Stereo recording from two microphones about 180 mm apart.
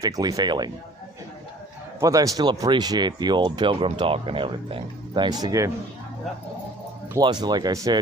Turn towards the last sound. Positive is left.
turn(degrees=-20)  # may be behind; listen again after turning